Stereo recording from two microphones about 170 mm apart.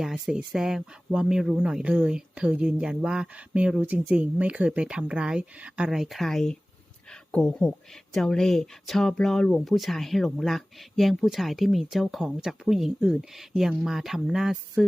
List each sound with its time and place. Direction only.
0.0 s speech: 5° right (ahead or behind)